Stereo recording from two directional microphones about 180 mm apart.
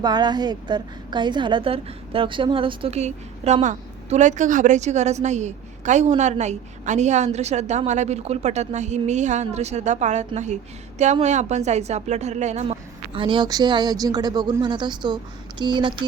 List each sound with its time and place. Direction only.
0.0 s a woman's voice: 25° right (ahead or behind); by 12.7 s 40° right (ahead or behind)
13.1 s speech: 25° right (ahead or behind)